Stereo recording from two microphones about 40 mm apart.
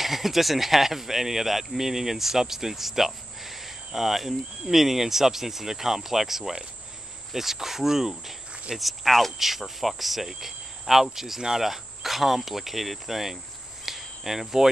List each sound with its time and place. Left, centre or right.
0.0 s speech: centre
13.8 s cricket: centre